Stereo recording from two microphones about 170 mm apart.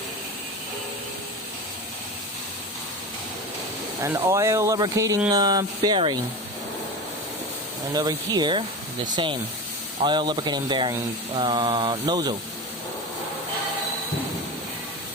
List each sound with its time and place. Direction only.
4.0 s speech: 20° right (ahead or behind)
5.3 s mantra: 25° right (ahead or behind)
7.9 s mantra: 25° right (ahead or behind)